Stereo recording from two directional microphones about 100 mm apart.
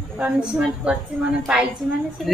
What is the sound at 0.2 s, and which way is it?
A woman's voice, 10° right (ahead or behind).